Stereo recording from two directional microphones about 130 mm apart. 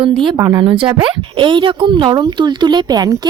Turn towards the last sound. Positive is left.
turn(degrees=-30)  # may be behind; listen again after turning